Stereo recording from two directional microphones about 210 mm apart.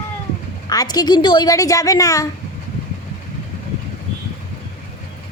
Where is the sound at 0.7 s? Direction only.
20° left (ahead or behind).